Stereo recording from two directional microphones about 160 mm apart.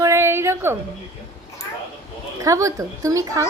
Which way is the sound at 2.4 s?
20° right (ahead or behind).